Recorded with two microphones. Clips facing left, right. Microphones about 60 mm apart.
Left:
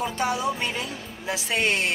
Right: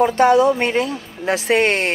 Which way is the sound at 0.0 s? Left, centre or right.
Right.